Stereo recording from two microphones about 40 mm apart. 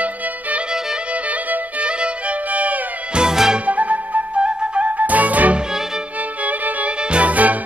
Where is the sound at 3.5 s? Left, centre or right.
Right.